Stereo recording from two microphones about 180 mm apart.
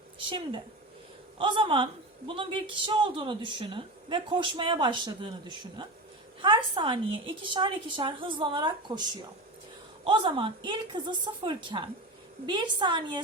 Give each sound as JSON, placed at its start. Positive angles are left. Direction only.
{"t": 0.2, "sound": "a woman's voice", "side_deg": -30}
{"t": 10.0, "sound": "a woman's voice", "side_deg": -30}